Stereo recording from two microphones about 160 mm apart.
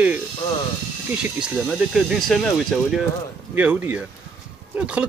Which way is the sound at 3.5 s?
10° right (ahead or behind).